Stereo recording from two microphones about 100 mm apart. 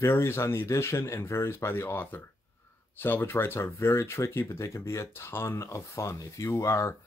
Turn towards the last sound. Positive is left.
turn(degrees=30)  # may be behind; listen again after turning